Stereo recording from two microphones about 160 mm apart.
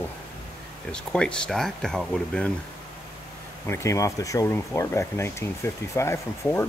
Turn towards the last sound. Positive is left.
turn(degrees=15)  # may be behind; listen again after turning